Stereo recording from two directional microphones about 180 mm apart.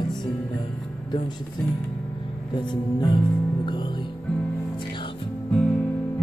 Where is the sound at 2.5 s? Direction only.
25° left (ahead or behind).